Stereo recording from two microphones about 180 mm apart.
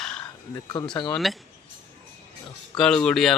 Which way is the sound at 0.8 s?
30° left (ahead or behind).